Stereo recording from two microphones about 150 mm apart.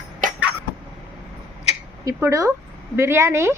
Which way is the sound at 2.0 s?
20° right (ahead or behind).